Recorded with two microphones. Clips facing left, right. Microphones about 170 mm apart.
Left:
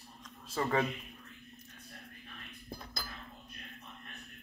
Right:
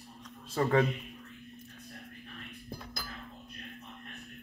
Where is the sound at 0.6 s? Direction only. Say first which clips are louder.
Right 4 dB; 40° right (ahead or behind).